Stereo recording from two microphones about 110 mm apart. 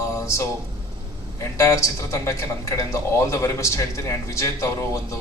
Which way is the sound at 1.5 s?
25° left (ahead or behind).